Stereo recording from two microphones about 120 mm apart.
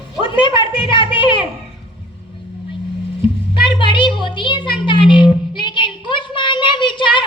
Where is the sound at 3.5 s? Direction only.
45° left (ahead or behind).